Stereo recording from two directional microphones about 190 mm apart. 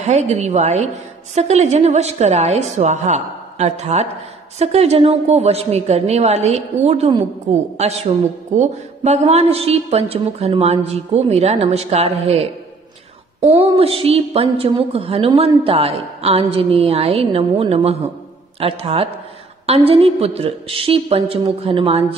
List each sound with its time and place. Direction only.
0.0 s a woman's voice: 35° right (ahead or behind)
13.5 s a woman's voice: 30° right (ahead or behind)